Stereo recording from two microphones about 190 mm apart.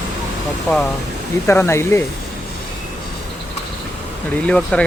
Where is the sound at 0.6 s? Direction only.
Centre (ahead or behind).